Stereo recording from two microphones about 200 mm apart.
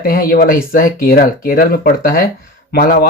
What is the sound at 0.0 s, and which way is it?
Speech, 45° left (ahead or behind).